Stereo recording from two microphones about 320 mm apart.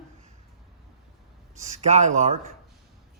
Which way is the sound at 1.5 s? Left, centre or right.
Right.